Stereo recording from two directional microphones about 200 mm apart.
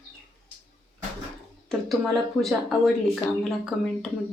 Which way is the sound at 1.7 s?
Centre (ahead or behind).